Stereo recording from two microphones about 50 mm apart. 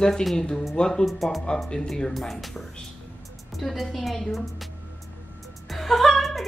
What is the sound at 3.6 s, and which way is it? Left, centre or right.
Speech, centre.